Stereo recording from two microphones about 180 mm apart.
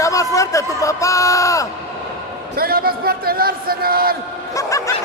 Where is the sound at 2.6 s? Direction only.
55° right (ahead or behind).